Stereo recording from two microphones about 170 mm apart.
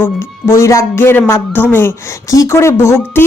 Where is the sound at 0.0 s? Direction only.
15° left (ahead or behind).